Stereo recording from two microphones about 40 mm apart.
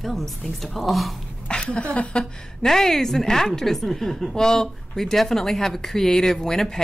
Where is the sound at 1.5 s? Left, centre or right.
Left.